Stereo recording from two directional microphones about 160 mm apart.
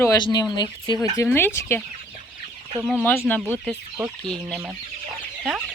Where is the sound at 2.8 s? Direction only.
10° left (ahead or behind).